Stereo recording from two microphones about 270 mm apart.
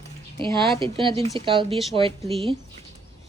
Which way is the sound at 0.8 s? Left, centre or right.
Centre.